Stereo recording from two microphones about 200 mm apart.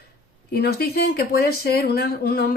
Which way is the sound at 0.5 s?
50° left (ahead or behind).